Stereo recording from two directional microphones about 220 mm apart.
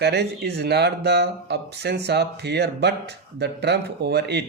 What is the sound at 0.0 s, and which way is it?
Speech, 50° right (ahead or behind).